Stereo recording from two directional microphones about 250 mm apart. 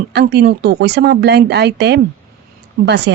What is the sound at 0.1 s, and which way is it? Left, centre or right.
Speech, right.